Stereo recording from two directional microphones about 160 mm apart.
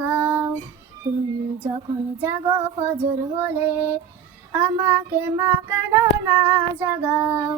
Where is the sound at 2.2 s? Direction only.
15° right (ahead or behind).